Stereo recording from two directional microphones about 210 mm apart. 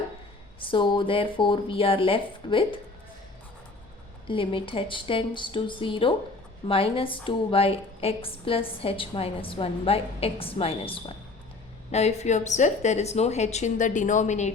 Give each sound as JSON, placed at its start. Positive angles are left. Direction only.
{"t": 0.6, "sound": "a woman's voice", "side_deg": 25}
{"t": 4.3, "sound": "a woman's voice", "side_deg": 25}